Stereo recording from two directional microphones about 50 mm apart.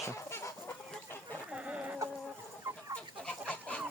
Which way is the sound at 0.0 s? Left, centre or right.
Left.